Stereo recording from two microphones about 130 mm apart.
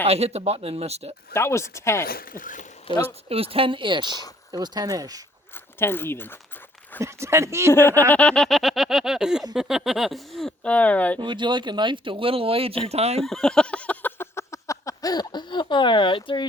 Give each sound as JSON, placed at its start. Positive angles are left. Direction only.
{"t": 0.1, "sound": "speech", "side_deg": -55}
{"t": 1.3, "sound": "speech", "side_deg": 20}
{"t": 2.2, "sound": "speech", "side_deg": 90}
{"t": 3.0, "sound": "speech", "side_deg": -50}
{"t": 5.8, "sound": "speech", "side_deg": 15}
{"t": 7.0, "sound": "speech", "side_deg": -20}
{"t": 7.7, "sound": "speech", "side_deg": 15}
{"t": 8.1, "sound": "speech", "side_deg": 5}
{"t": 11.2, "sound": "speech", "side_deg": -35}
{"t": 13.2, "sound": "a sound", "side_deg": 5}